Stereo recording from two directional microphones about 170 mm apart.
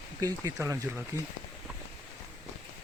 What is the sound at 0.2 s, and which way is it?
Speech, 20° right (ahead or behind).